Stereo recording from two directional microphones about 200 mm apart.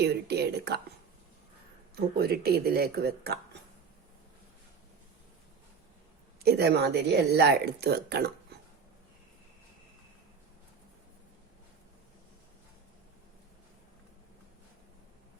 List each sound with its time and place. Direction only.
0.0 s speech: 55° right (ahead or behind)
2.0 s speech: 50° right (ahead or behind)
6.4 s speech: 55° right (ahead or behind)